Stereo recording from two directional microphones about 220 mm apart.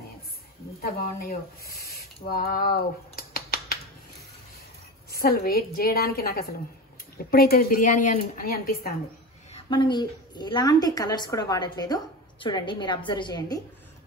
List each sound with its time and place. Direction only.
0.7 s speech: 45° left (ahead or behind)
5.1 s a woman's voice: 45° left (ahead or behind)
9.5 s a woman's voice: 20° left (ahead or behind)